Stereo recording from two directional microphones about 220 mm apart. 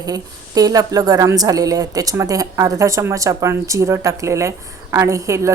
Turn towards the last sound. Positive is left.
turn(degrees=-15)  # may be behind; listen again after turning